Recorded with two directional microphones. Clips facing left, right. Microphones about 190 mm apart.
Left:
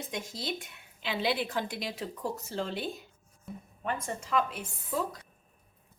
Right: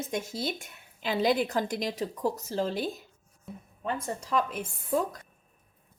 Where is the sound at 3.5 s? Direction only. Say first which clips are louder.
Even; centre (ahead or behind).